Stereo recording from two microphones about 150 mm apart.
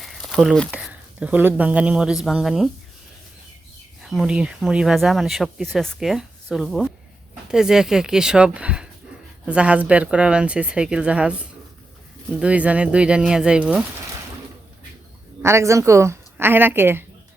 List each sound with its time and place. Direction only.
0.0 s a sound: centre (ahead or behind)
0.7 s speech: 5° right (ahead or behind)
4.0 s speech: centre (ahead or behind)
15.4 s speech: 20° right (ahead or behind)